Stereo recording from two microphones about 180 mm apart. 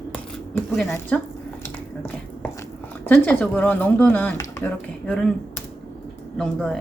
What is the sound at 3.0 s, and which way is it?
A woman's voice, 10° left (ahead or behind).